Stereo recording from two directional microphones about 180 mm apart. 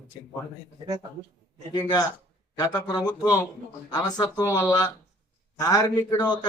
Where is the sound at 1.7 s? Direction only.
20° left (ahead or behind).